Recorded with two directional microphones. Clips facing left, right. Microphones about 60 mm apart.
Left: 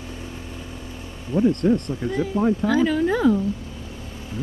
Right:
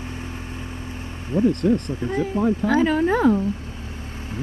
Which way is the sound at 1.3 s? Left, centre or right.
Left.